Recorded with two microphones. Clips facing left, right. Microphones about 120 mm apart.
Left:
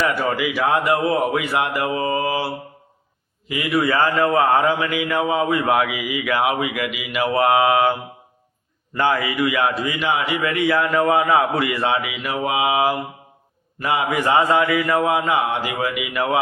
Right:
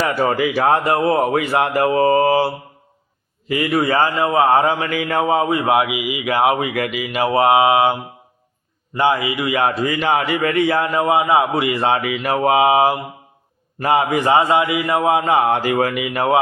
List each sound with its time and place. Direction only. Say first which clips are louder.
0.1 s a man's voice: right 4 dB; 35° right (ahead or behind)
3.5 s a man's voice: right 2 dB; 45° right (ahead or behind)
6.7 s speech: right 3 dB; 45° right (ahead or behind); by 7.9 s 20° right (ahead or behind)
9.0 s speech: right 2 dB; 20° right (ahead or behind)
9.6 s a man's voice: right 3 dB; 40° right (ahead or behind); by 15.2 s 25° right (ahead or behind)
15.2 s speech: right 4 dB; 45° right (ahead or behind)